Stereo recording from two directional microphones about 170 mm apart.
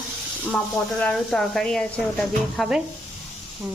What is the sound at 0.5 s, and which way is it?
Speech, 5° left (ahead or behind).